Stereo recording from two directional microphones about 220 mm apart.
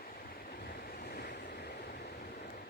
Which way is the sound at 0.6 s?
45° left (ahead or behind).